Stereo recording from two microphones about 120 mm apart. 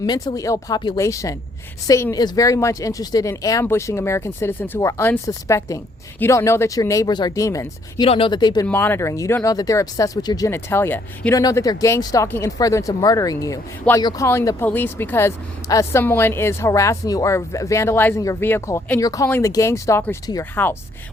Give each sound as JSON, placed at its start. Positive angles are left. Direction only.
{"t": 0.0, "sound": "speech", "side_deg": 35}
{"t": 8.0, "sound": "speech", "side_deg": 50}
{"t": 8.6, "sound": "speech", "side_deg": 15}
{"t": 11.3, "sound": "speech", "side_deg": 30}
{"t": 14.3, "sound": "speech", "side_deg": 20}